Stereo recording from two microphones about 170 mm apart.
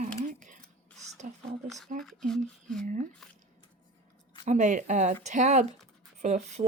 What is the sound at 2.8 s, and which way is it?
Speech, 50° right (ahead or behind).